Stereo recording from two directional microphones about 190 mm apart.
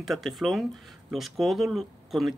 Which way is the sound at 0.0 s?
Centre (ahead or behind).